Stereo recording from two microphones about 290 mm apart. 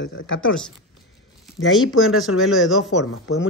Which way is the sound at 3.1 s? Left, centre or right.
Left.